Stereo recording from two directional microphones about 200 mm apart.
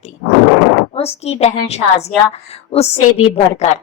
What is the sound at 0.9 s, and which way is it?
A woman's voice, 30° left (ahead or behind).